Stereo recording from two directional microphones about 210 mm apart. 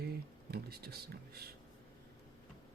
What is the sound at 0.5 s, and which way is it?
Speech, 50° right (ahead or behind).